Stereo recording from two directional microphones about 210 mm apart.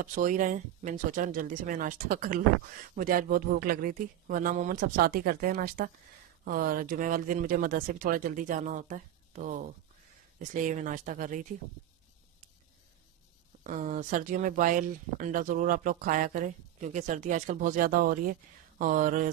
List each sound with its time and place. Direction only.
0.0 s speech: 40° right (ahead or behind)
13.7 s speech: 35° right (ahead or behind)